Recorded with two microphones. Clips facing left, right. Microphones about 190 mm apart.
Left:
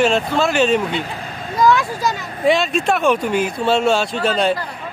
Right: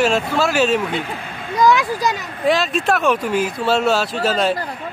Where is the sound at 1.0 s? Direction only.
40° left (ahead or behind).